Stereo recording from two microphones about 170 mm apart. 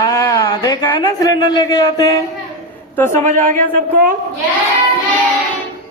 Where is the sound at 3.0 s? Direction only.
45° right (ahead or behind).